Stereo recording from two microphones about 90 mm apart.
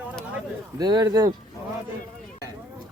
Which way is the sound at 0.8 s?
50° right (ahead or behind).